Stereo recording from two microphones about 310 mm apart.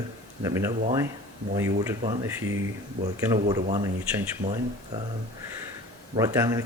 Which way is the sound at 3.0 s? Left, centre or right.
Right.